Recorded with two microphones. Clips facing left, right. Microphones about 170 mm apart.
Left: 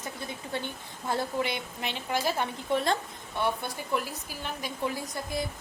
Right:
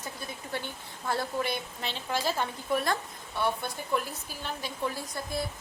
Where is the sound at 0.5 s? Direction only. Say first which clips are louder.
Left 1 dB; 20° left (ahead or behind).